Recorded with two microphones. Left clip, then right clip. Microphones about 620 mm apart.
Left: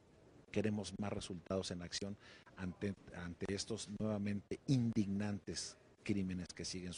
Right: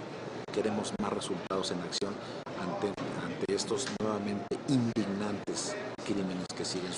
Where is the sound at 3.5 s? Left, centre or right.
Left.